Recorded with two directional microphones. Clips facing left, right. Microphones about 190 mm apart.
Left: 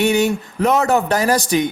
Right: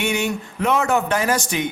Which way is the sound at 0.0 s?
40° left (ahead or behind).